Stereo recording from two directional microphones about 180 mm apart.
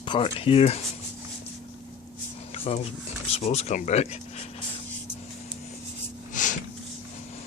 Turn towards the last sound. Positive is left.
turn(degrees=45)  # may be behind; listen again after turning